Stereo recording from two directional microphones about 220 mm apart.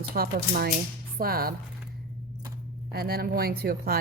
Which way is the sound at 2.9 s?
45° right (ahead or behind).